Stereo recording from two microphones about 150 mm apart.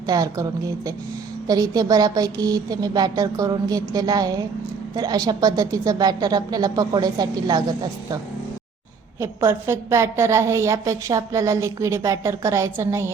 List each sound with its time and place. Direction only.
0.1 s a woman's voice: 25° right (ahead or behind)
1.5 s a woman's voice: 25° right (ahead or behind)
9.2 s a woman's voice: 15° right (ahead or behind)